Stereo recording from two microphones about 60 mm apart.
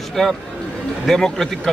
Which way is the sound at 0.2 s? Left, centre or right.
Centre.